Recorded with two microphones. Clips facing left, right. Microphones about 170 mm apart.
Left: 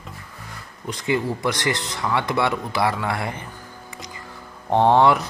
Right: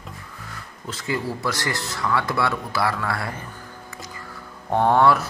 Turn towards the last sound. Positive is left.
turn(degrees=20)  # may be behind; listen again after turning